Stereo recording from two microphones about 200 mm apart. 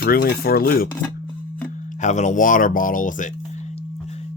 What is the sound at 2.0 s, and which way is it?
Speech, 35° left (ahead or behind).